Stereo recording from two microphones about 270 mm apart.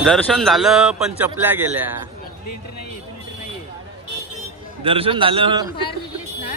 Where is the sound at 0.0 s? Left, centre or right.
Centre.